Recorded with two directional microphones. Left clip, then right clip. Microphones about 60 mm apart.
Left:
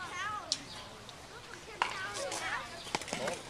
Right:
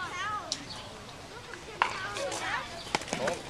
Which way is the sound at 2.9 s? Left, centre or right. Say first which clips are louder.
Right 5 dB; centre.